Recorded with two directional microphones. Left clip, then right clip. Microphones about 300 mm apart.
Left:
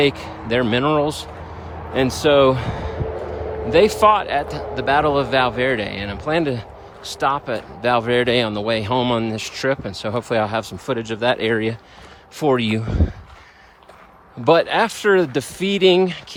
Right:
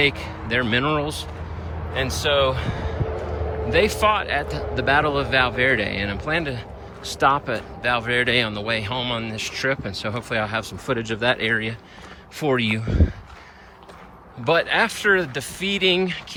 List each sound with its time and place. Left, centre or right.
0.0 s speech: centre
14.4 s speech: centre